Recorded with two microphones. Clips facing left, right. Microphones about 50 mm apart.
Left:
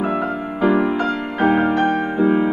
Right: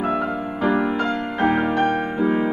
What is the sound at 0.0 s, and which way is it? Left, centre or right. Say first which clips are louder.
Music: left 1 dB; centre.